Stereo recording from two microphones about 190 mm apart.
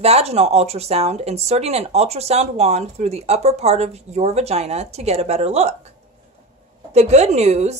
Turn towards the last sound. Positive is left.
turn(degrees=-35)  # may be behind; listen again after turning